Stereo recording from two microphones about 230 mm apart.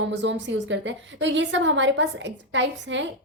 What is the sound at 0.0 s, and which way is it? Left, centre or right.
A woman's voice, right.